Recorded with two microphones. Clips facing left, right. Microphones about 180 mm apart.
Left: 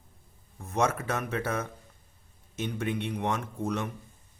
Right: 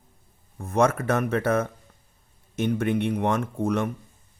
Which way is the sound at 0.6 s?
55° right (ahead or behind).